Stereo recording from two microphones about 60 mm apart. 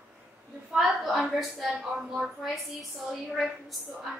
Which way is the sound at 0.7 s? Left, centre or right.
Centre.